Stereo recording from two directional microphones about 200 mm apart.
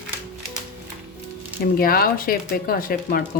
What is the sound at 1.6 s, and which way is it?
Speech, 50° left (ahead or behind).